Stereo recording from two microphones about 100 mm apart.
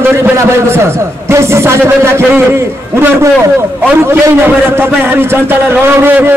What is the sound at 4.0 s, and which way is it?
A man's voice, 25° right (ahead or behind).